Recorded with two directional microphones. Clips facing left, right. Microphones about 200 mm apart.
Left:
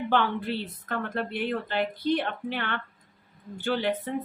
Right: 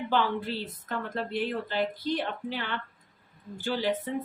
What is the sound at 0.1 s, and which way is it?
Speech, 60° left (ahead or behind).